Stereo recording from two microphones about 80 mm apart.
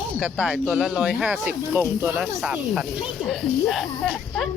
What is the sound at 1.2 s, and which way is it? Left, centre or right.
Speech, centre.